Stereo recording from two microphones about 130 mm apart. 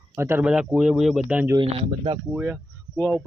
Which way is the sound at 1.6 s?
40° right (ahead or behind).